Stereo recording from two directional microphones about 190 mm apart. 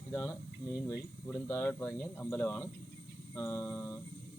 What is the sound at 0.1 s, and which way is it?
Speech, 10° left (ahead or behind).